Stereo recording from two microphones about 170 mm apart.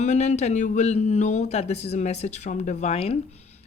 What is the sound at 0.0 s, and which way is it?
Speech, 40° left (ahead or behind).